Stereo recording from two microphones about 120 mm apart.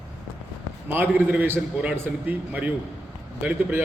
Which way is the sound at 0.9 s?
15° right (ahead or behind).